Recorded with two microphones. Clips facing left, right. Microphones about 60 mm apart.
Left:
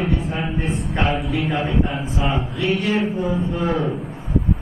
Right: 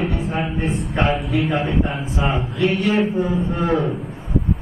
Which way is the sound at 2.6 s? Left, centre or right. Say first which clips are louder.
Right 3 dB; right.